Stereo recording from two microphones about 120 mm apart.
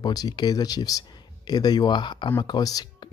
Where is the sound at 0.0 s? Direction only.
35° left (ahead or behind).